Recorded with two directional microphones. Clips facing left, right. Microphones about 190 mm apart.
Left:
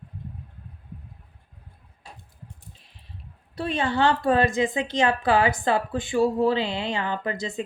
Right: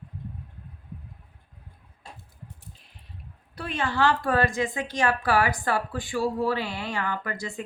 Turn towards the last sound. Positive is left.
turn(degrees=20)  # may be behind; listen again after turning